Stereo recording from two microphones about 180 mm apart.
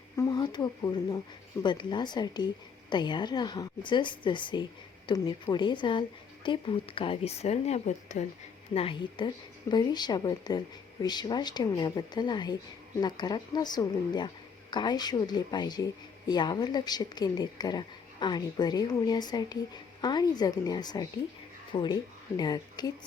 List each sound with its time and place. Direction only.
0.2 s speech: 25° left (ahead or behind); by 8.3 s 40° left (ahead or behind)
8.7 s speech: 30° left (ahead or behind)